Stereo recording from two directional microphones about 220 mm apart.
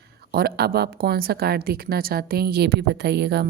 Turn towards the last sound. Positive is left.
turn(degrees=-50)  # may be behind; listen again after turning